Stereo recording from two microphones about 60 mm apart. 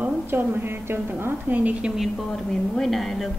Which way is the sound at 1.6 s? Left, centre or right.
Right.